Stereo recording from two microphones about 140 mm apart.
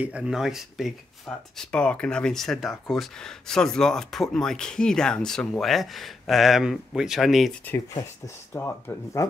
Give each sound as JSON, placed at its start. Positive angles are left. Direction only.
{"t": 0.0, "sound": "speech", "side_deg": -10}
{"t": 8.5, "sound": "speech", "side_deg": 15}